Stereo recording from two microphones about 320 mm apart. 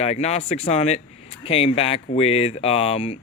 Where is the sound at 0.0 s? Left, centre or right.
Centre.